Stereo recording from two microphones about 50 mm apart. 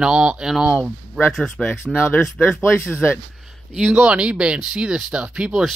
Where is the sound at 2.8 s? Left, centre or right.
Left.